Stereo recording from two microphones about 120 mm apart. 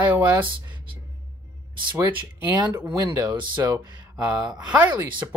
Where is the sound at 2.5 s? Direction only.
25° right (ahead or behind).